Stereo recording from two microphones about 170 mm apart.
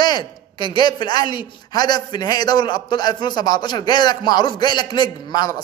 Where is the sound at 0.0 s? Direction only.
25° left (ahead or behind).